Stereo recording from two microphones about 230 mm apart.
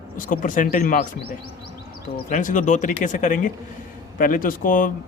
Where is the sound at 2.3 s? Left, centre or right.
Left.